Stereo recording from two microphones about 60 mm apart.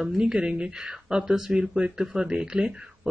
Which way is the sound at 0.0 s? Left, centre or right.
Centre.